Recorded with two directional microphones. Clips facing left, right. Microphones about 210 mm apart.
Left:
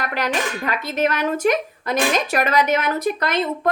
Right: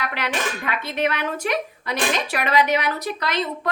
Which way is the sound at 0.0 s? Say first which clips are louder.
Left 3 dB; 40° left (ahead or behind).